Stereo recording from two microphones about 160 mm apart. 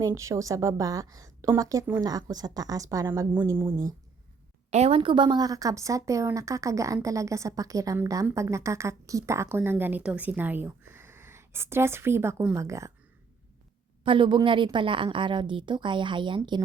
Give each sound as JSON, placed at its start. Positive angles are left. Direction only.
{"t": 0.0, "sound": "a woman's voice", "side_deg": -20}
{"t": 4.7, "sound": "a woman's voice", "side_deg": -40}
{"t": 14.0, "sound": "a woman's voice", "side_deg": -30}